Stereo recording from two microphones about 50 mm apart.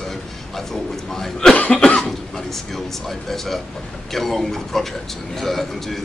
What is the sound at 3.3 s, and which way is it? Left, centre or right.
A man's voice, centre.